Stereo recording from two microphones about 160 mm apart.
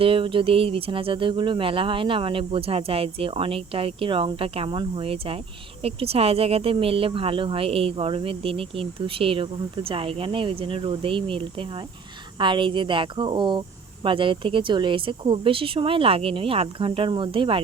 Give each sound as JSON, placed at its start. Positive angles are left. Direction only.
{"t": 0.0, "sound": "speech", "side_deg": -35}